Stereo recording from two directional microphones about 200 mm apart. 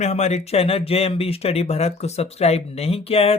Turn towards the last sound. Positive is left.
turn(degrees=30)  # may be behind; listen again after turning